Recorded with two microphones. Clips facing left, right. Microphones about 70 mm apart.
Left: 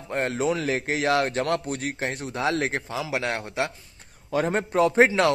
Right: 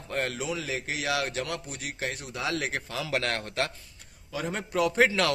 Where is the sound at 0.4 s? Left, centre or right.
Left.